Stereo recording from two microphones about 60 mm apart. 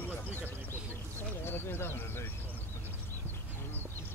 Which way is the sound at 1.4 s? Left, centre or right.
Left.